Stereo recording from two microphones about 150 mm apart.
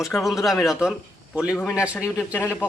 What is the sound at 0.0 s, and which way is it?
A man's voice, centre (ahead or behind).